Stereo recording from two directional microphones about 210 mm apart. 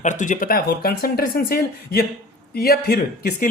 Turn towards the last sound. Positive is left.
turn(degrees=45)  # may be behind; listen again after turning